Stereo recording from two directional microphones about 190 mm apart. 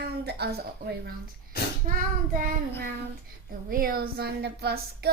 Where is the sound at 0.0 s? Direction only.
60° right (ahead or behind).